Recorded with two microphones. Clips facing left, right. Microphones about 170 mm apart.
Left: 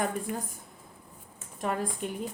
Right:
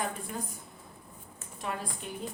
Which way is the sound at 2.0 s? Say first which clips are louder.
Left 6 dB; 50° left (ahead or behind).